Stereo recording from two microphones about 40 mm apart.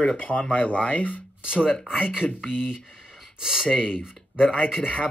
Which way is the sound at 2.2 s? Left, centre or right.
Left.